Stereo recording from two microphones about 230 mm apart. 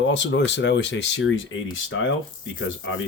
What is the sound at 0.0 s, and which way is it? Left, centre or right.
Speech, left.